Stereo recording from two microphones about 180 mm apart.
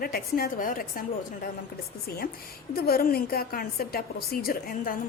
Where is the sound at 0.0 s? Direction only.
55° left (ahead or behind).